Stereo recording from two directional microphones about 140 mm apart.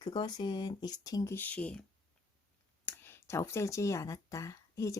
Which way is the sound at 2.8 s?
15° left (ahead or behind).